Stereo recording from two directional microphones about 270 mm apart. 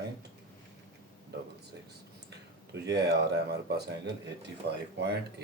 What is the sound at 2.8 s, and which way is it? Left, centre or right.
Speech, right.